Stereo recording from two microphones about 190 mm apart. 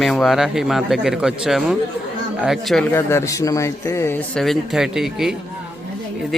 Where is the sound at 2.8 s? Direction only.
10° left (ahead or behind).